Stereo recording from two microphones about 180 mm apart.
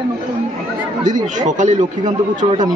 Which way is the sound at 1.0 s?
45° right (ahead or behind).